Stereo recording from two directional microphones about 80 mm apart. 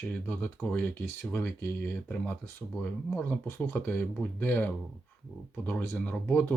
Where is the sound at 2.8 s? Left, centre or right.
Left.